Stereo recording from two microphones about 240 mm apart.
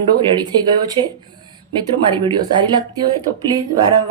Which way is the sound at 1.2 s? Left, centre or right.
Centre.